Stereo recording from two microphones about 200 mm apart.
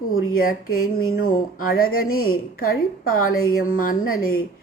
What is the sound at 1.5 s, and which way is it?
Speech, 45° left (ahead or behind).